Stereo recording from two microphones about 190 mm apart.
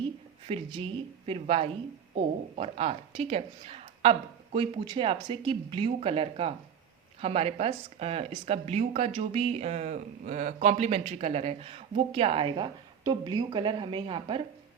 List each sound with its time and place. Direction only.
0.4 s a woman's voice: 30° right (ahead or behind)